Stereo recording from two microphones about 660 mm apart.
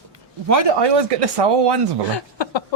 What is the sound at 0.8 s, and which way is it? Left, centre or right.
Speech, right.